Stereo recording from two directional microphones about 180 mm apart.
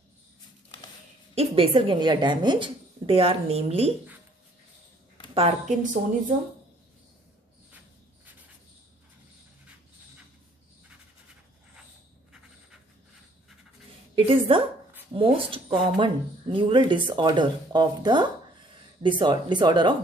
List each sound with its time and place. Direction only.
1.3 s a woman's voice: 35° right (ahead or behind)
5.3 s a woman's voice: 40° right (ahead or behind)
14.1 s speech: 30° right (ahead or behind)